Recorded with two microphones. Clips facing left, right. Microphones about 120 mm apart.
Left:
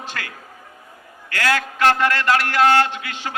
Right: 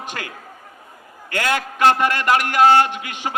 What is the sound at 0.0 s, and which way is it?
A man's voice, 15° right (ahead or behind).